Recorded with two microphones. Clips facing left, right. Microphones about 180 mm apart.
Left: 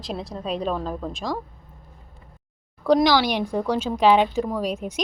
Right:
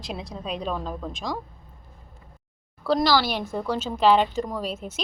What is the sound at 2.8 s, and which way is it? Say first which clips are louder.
A woman's voice: left 4 dB; 15° left (ahead or behind).